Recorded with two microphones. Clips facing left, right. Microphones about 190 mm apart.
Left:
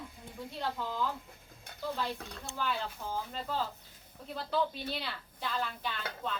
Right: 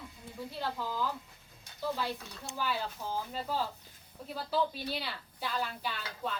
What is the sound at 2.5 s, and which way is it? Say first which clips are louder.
A woman's voice: right 1 dB; 10° right (ahead or behind).